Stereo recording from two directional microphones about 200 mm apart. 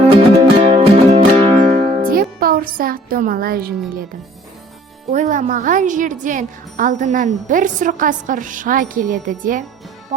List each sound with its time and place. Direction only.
0.1 s music: 30° right (ahead or behind)
2.0 s music: 45° right (ahead or behind)
5.1 s speech: 40° right (ahead or behind)
10.1 s music: 35° right (ahead or behind)